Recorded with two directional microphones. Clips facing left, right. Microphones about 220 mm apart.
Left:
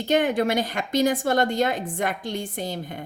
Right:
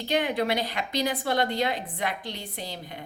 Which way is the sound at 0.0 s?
45° left (ahead or behind).